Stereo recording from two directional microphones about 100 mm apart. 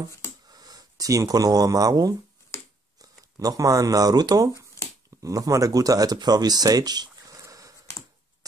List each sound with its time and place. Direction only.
0.5 s speech: 40° right (ahead or behind)
2.5 s a sound: 30° left (ahead or behind)
3.0 s speech: 35° right (ahead or behind)